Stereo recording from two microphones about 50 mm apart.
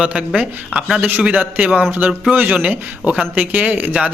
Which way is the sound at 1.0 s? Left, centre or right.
Right.